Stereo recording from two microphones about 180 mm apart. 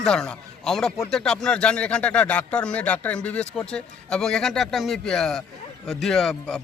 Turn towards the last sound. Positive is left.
turn(degrees=0)  # may be behind; listen again after turning